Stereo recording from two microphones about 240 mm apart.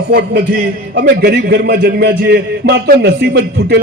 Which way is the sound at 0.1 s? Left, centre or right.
Right.